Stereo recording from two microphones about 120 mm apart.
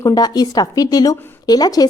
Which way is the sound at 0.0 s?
35° left (ahead or behind).